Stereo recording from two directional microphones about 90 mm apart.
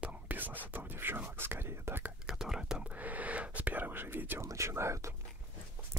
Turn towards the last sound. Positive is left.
turn(degrees=-30)  # may be behind; listen again after turning